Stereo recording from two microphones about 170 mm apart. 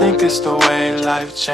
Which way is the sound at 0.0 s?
Centre (ahead or behind).